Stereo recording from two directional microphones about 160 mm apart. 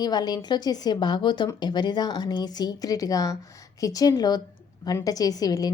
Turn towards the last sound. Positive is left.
turn(degrees=25)  # may be behind; listen again after turning